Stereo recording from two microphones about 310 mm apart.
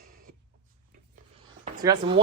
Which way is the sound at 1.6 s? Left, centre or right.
Centre.